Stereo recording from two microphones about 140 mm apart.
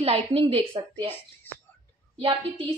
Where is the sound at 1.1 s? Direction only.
15° left (ahead or behind).